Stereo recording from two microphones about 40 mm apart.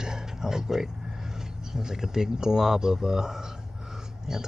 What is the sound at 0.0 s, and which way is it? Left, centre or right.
Speech, centre.